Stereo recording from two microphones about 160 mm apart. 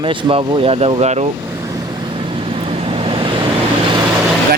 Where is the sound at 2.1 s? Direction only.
35° right (ahead or behind).